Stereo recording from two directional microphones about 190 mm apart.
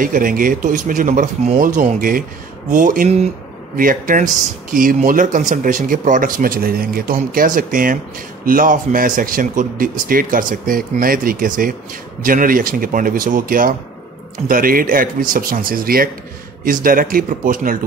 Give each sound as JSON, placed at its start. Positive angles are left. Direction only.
{"t": 0.0, "sound": "speech", "side_deg": -45}